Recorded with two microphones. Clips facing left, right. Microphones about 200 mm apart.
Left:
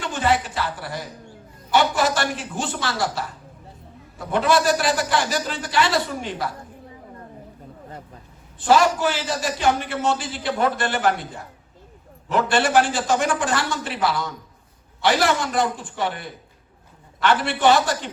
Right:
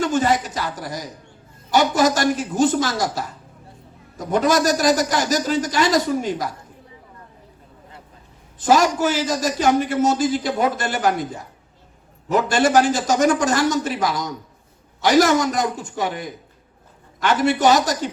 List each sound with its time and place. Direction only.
0.0 s a man's voice: 40° right (ahead or behind)
8.5 s a man's voice: 40° right (ahead or behind)
12.5 s a man's voice: 40° right (ahead or behind)
16.0 s a man's voice: 15° right (ahead or behind)
17.2 s a man's voice: 40° right (ahead or behind)